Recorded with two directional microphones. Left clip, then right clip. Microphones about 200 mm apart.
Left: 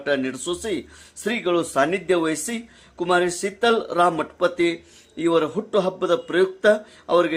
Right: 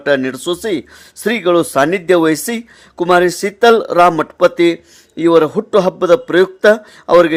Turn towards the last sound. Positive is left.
turn(degrees=-45)  # may be behind; listen again after turning